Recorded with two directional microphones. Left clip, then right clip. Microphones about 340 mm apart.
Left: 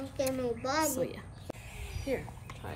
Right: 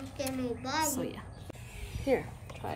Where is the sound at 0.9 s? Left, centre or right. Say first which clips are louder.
Left 2 dB; centre.